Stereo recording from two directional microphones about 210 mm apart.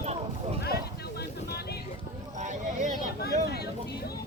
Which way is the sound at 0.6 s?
50° left (ahead or behind).